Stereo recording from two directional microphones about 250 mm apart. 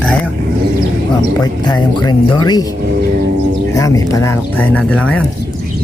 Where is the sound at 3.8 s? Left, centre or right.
Centre.